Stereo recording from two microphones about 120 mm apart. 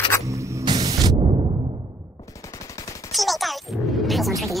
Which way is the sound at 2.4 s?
25° left (ahead or behind).